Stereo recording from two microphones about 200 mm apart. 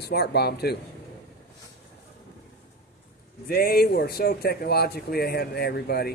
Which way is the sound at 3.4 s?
50° left (ahead or behind).